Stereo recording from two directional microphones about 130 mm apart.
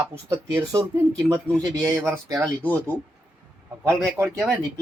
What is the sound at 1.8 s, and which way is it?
Speech, 25° right (ahead or behind).